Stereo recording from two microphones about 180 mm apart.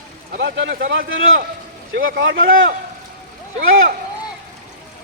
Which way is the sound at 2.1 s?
80° right.